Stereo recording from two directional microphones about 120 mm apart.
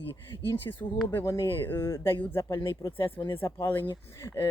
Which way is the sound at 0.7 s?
25° left (ahead or behind).